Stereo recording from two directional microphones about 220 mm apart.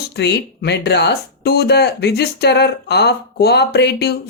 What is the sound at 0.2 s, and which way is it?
Speech, 50° left (ahead or behind).